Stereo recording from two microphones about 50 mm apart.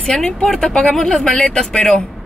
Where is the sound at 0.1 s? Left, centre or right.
Centre.